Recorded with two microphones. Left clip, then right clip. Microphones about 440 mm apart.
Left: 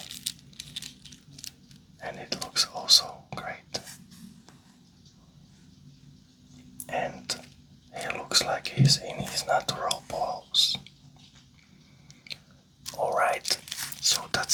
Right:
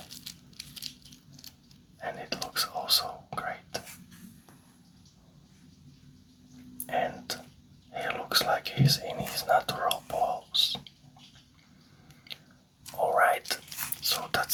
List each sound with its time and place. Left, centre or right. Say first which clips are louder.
2.0 s whispering: even; left
6.8 s a sound: right 1 dB; left
7.9 s whispering: left 1 dB; left
13.0 s whispering: right 1 dB; left